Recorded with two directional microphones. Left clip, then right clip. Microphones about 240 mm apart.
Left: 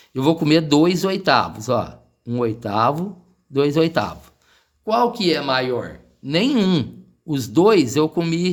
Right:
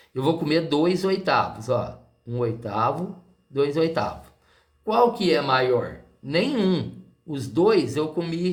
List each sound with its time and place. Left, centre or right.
0.1 s speech: left